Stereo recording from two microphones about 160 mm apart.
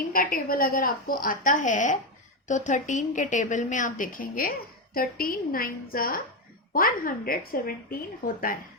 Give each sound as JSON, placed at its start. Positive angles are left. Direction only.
{"t": 0.1, "sound": "a woman's voice", "side_deg": 65}